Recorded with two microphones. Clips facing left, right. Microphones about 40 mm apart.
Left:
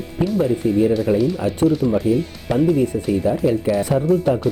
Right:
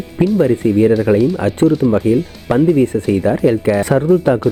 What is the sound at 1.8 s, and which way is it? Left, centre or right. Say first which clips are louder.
Speech: right 5 dB; centre.